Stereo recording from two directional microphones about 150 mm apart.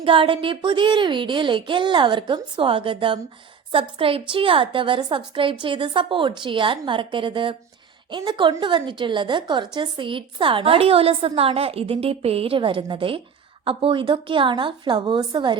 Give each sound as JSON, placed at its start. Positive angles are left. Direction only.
{"t": 0.0, "sound": "a woman's voice", "side_deg": -35}